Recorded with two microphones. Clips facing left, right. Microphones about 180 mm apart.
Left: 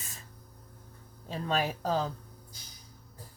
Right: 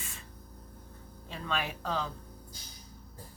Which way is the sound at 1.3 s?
40° left (ahead or behind).